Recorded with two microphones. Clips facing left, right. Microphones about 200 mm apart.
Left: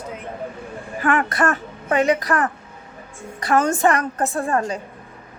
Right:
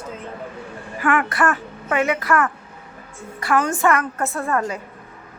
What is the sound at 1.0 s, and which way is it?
A woman's voice, 35° left (ahead or behind).